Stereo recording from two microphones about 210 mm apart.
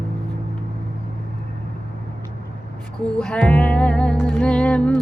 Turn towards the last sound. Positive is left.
turn(degrees=5)  # may be behind; listen again after turning